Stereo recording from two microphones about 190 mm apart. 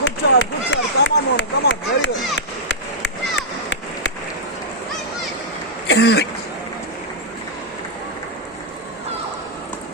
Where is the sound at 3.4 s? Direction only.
70° left (ahead or behind).